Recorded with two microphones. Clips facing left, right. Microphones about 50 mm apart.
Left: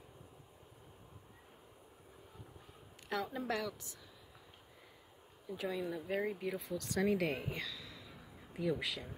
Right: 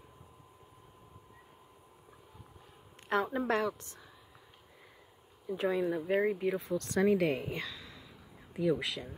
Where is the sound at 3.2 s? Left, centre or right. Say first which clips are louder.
Right 7 dB; right.